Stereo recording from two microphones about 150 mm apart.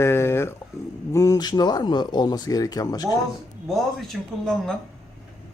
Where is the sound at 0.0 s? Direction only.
15° left (ahead or behind).